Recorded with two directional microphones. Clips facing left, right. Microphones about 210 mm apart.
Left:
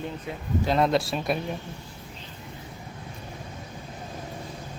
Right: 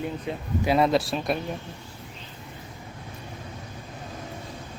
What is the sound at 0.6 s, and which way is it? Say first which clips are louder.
Speech: right 2 dB; 5° right (ahead or behind).